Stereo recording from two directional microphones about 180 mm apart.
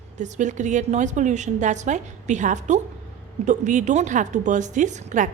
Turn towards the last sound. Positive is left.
turn(degrees=-45)  # may be behind; listen again after turning